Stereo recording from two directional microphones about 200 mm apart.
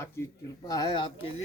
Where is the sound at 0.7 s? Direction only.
20° left (ahead or behind).